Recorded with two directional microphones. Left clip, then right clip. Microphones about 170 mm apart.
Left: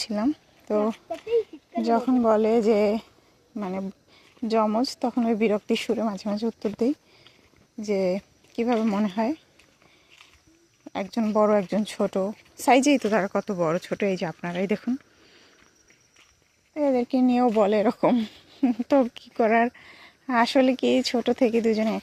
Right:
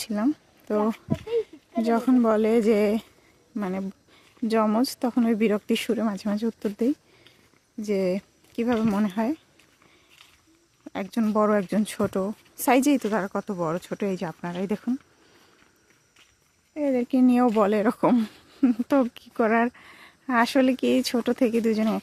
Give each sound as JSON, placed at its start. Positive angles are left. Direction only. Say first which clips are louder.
{"t": 0.0, "sound": "a woman's voice", "louder": "even", "side_deg": -15}
{"t": 10.8, "sound": "a woman's voice", "louder": "even", "side_deg": -20}
{"t": 13.0, "sound": "speech", "louder": "left 3 dB", "side_deg": 5}
{"t": 16.7, "sound": "a woman's voice", "louder": "left 1 dB", "side_deg": -15}